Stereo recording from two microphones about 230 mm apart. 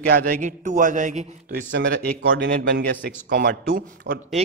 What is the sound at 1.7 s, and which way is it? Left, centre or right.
Speech, right.